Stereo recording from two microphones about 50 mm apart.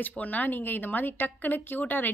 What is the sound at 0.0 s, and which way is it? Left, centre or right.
A woman's voice, left.